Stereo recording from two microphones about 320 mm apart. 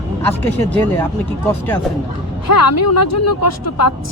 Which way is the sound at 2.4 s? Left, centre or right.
Left.